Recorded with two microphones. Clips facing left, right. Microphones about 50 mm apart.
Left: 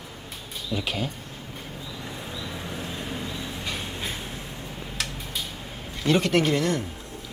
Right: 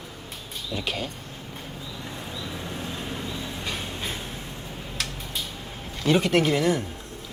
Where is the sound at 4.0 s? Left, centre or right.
Centre.